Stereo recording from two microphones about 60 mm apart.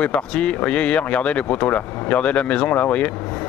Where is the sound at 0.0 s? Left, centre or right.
Left.